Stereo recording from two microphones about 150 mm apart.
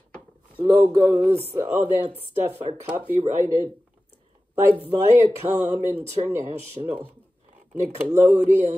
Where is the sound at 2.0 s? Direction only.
40° right (ahead or behind).